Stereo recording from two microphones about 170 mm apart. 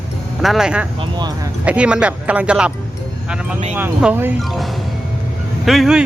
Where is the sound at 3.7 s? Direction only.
10° right (ahead or behind).